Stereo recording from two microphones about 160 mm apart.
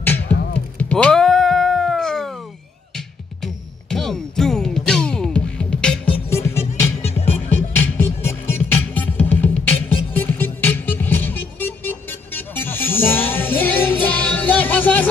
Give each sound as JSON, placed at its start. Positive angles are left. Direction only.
{"t": 0.7, "sound": "cat", "side_deg": 10}
{"t": 3.4, "sound": "music", "side_deg": 0}
{"t": 7.0, "sound": "music", "side_deg": 40}
{"t": 7.4, "sound": "music", "side_deg": 10}